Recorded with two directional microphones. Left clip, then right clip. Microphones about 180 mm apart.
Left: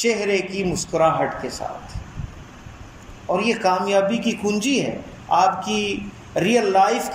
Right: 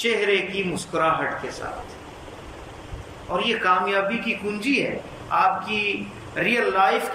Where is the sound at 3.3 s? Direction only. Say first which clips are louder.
Left 1 dB; 30° left (ahead or behind).